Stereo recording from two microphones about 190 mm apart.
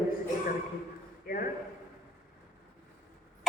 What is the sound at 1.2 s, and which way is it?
Speech, 50° left (ahead or behind).